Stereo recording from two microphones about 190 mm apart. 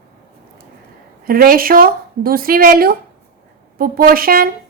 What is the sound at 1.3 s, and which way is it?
A woman's voice, 50° right (ahead or behind).